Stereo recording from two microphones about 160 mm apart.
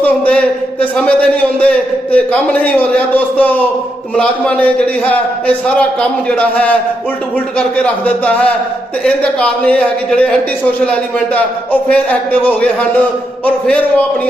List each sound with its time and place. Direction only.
0.0 s a man's voice: 10° left (ahead or behind)
8.0 s a man's voice: 10° left (ahead or behind)